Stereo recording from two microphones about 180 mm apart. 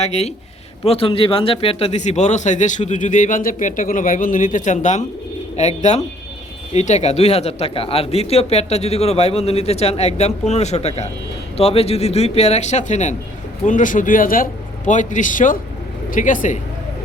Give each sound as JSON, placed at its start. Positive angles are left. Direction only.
{"t": 0.0, "sound": "speech", "side_deg": 35}